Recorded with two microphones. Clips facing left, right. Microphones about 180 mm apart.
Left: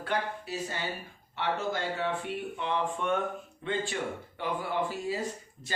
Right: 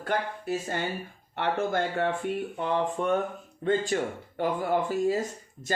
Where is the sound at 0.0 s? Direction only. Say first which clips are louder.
Right 3 dB; 50° right (ahead or behind).